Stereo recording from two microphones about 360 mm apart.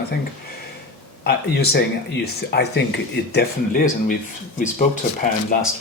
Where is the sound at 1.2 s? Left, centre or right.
Left.